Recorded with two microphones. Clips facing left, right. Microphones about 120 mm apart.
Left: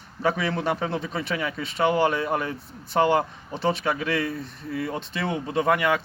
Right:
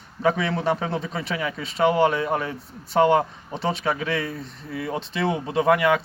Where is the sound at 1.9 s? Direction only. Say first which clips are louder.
Right 2 dB; 30° right (ahead or behind).